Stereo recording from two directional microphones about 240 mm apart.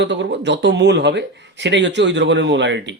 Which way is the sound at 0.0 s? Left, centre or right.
Right.